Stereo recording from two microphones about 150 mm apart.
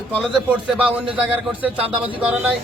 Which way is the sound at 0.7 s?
10° right (ahead or behind).